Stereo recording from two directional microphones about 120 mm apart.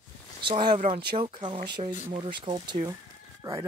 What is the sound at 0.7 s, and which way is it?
Speech, 65° right (ahead or behind).